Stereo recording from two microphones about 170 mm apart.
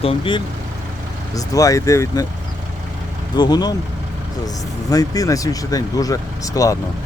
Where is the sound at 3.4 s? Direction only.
25° left (ahead or behind).